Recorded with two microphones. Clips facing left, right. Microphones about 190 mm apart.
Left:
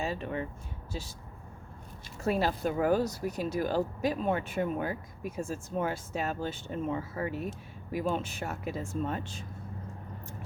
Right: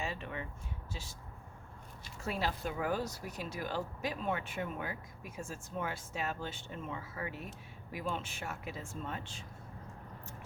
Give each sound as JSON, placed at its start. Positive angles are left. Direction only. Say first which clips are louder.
{"t": 0.0, "sound": "speech", "louder": "left 7 dB", "side_deg": 40}
{"t": 2.2, "sound": "speech", "louder": "left 8 dB", "side_deg": 45}